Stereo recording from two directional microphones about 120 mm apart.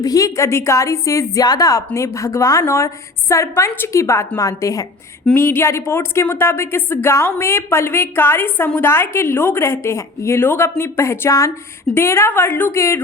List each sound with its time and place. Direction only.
0.0 s a woman's voice: 30° left (ahead or behind)